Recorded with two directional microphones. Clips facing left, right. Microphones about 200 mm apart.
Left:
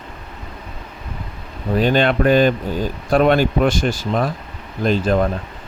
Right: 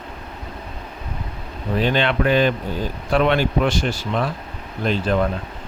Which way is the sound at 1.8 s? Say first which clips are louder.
Left 4 dB; 45° left (ahead or behind).